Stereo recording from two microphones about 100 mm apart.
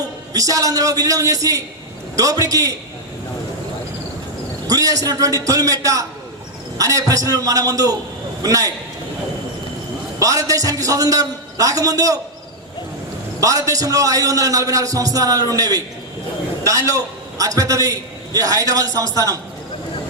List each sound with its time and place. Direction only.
0.3 s a man's voice: 35° right (ahead or behind)
4.7 s a man's voice: 35° right (ahead or behind)
10.2 s a man's voice: 35° right (ahead or behind)
13.4 s a man's voice: 35° right (ahead or behind)